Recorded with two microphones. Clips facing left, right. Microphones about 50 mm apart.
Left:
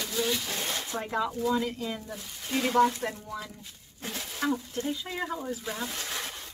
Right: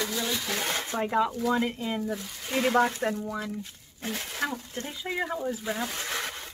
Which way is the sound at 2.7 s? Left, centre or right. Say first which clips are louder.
Left 2 dB; right.